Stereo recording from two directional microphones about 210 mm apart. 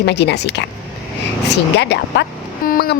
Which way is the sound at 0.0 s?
55° left (ahead or behind).